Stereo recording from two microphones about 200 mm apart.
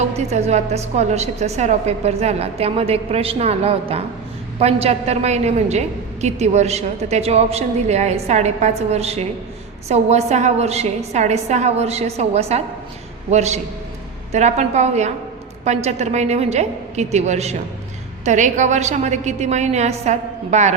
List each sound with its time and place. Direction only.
0.0 s a woman's voice: 35° right (ahead or behind)